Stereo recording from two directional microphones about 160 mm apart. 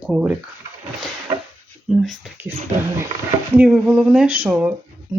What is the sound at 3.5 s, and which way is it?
Speech, 5° right (ahead or behind).